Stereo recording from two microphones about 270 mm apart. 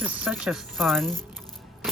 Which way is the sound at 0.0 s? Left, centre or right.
Centre.